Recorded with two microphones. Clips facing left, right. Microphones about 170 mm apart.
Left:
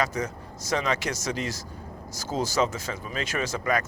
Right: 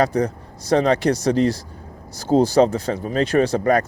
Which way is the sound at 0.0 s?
35° right (ahead or behind).